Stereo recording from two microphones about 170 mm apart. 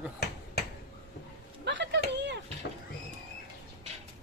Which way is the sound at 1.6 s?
90° right.